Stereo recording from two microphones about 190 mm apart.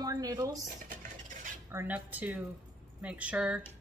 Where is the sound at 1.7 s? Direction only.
10° right (ahead or behind).